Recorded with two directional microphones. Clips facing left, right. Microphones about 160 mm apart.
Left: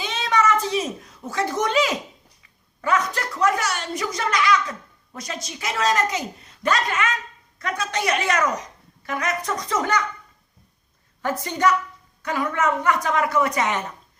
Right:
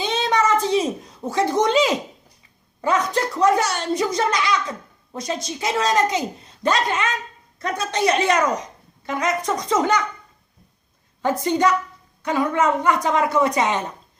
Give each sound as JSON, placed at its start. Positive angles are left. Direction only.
{"t": 0.0, "sound": "a sound", "side_deg": -25}
{"t": 2.8, "sound": "speech", "side_deg": -25}
{"t": 11.2, "sound": "speech", "side_deg": -20}